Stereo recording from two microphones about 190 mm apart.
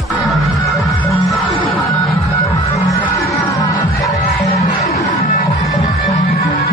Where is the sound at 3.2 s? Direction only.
15° left (ahead or behind).